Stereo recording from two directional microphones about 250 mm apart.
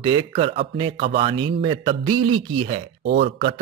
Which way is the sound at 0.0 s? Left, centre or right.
Right.